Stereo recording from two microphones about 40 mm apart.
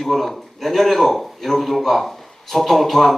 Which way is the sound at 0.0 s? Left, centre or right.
Centre.